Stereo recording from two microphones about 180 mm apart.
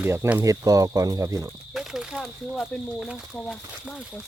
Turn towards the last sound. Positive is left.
turn(degrees=-5)  # may be behind; listen again after turning